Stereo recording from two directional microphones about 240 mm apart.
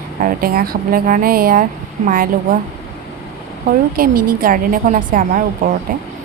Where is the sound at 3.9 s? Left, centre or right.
Right.